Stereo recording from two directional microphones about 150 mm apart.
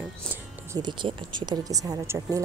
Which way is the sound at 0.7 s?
30° right (ahead or behind).